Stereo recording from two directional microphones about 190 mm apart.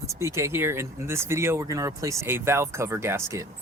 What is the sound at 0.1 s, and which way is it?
Speech, 15° right (ahead or behind).